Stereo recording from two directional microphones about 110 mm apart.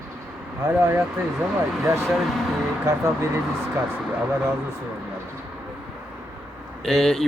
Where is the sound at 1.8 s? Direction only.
25° right (ahead or behind).